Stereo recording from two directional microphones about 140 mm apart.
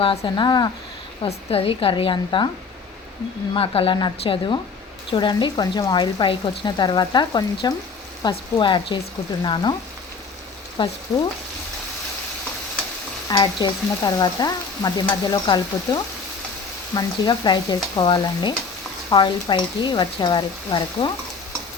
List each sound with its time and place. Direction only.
0.0 s speech: 40° left (ahead or behind)
1.2 s speech: 45° left (ahead or behind)
3.5 s speech: 40° left (ahead or behind)
10.8 s speech: 35° left (ahead or behind)
13.2 s frying: 30° left (ahead or behind)
16.9 s speech: 30° left (ahead or behind)